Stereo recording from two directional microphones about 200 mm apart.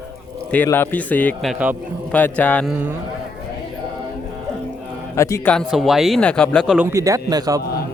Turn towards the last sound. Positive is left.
turn(degrees=-20)  # may be behind; listen again after turning